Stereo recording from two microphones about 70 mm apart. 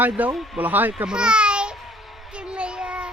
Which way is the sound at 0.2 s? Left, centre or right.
Right.